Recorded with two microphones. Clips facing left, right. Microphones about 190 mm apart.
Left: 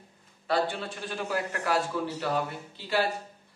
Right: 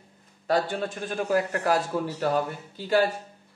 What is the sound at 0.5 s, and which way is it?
A man's voice, 45° right (ahead or behind).